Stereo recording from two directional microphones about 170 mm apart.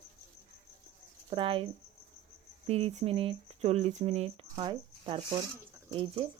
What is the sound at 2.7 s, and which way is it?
Speech, 35° right (ahead or behind).